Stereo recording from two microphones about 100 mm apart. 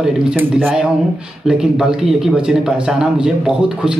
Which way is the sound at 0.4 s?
15° right (ahead or behind).